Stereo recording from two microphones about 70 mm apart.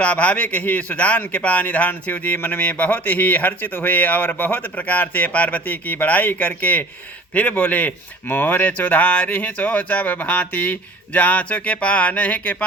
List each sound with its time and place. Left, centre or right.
0.0 s speech: left